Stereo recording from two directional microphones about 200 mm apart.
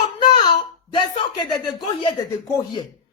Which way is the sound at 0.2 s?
25° left (ahead or behind).